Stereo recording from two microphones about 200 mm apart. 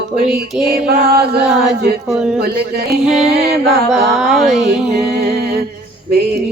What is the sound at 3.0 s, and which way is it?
Music, centre (ahead or behind).